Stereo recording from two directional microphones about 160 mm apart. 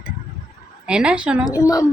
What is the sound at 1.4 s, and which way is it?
Speech, 20° left (ahead or behind).